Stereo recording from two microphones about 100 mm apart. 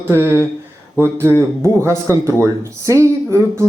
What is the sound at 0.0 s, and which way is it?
Speech, 25° right (ahead or behind).